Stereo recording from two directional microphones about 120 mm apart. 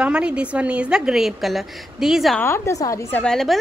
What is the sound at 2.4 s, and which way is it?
Speech, 25° left (ahead or behind).